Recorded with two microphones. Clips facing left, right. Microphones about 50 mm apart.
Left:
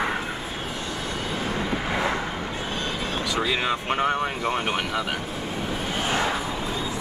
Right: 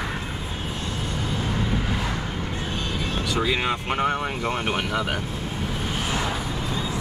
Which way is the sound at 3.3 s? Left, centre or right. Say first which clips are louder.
Right 1 dB; centre.